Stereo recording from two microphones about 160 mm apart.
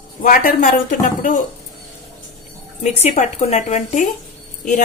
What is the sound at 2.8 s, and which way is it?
A woman's voice, 45° left (ahead or behind).